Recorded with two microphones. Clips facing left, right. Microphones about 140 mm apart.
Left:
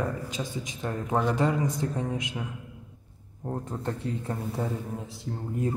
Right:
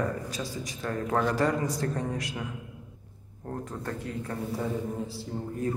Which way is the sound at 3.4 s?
25° left (ahead or behind).